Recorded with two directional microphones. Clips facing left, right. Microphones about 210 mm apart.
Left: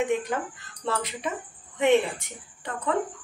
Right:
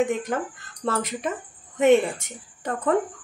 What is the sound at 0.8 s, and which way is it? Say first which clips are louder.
A woman's voice: right 3 dB; 45° right (ahead or behind).